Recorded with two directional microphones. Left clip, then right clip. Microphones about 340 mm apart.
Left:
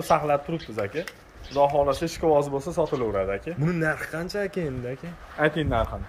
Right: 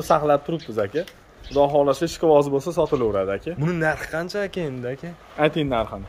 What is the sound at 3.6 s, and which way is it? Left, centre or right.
Speech, centre.